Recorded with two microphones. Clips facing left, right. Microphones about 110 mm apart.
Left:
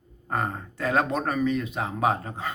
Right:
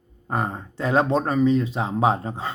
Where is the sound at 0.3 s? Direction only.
20° right (ahead or behind).